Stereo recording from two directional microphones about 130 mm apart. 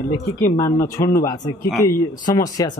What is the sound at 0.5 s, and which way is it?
Speech, 25° left (ahead or behind).